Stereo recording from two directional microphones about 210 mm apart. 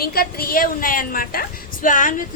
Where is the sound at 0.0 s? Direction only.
45° left (ahead or behind).